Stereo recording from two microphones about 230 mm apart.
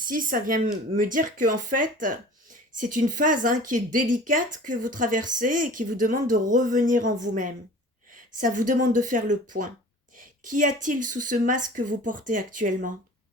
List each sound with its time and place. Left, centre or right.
0.1 s a woman's voice: right